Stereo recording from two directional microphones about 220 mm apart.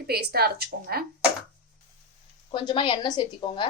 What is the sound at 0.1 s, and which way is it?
Speech, 45° right (ahead or behind).